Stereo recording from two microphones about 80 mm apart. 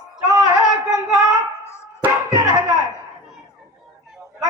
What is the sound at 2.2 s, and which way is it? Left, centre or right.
Music, right.